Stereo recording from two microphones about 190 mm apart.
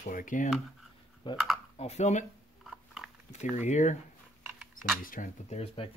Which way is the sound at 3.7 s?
40° left (ahead or behind).